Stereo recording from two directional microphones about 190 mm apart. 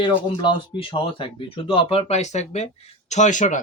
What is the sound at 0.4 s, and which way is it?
Speech, 25° left (ahead or behind).